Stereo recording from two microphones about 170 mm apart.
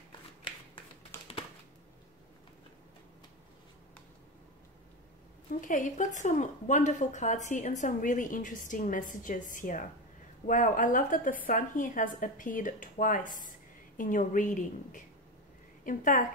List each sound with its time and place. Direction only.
0.4 s shuffling cards: 30° left (ahead or behind)
1.1 s typing: 15° left (ahead or behind)
5.5 s a woman's voice: 50° left (ahead or behind)